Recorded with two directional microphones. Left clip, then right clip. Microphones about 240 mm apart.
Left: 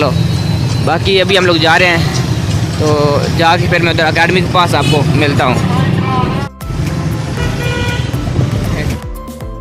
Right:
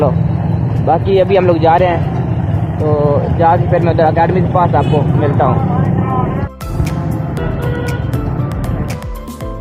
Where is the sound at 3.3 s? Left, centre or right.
Left.